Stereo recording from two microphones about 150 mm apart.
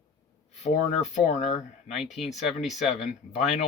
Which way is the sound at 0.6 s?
50° left (ahead or behind).